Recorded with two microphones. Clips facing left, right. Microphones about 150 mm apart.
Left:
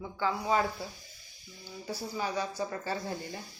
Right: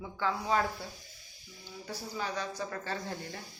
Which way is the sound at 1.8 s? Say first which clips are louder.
Left 3 dB; 10° left (ahead or behind).